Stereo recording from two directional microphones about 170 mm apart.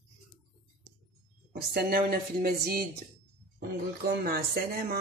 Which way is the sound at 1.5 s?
65° right (ahead or behind).